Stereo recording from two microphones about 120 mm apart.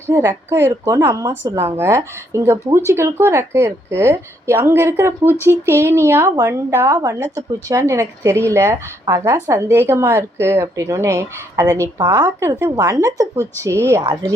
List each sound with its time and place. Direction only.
0.1 s speech: 25° right (ahead or behind)